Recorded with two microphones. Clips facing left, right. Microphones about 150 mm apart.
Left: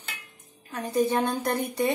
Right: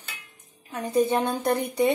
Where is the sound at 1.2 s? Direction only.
25° right (ahead or behind).